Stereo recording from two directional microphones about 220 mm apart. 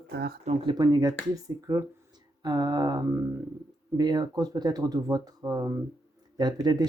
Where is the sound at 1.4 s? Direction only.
15° right (ahead or behind).